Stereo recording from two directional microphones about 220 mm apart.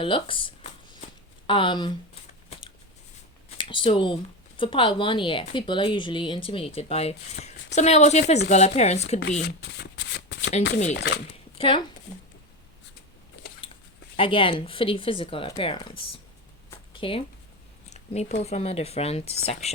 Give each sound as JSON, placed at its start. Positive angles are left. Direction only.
{"t": 0.0, "sound": "a sound", "side_deg": 25}
{"t": 1.5, "sound": "speech", "side_deg": 20}
{"t": 2.5, "sound": "a sound", "side_deg": 25}
{"t": 3.6, "sound": "speech", "side_deg": 20}
{"t": 9.4, "sound": "shuffling cards", "side_deg": 50}
{"t": 10.9, "sound": "speech", "side_deg": 50}
{"t": 11.5, "sound": "speech", "side_deg": 25}
{"t": 14.2, "sound": "speech", "side_deg": 25}
{"t": 16.6, "sound": "a sound", "side_deg": 20}
{"t": 17.8, "sound": "speech", "side_deg": 30}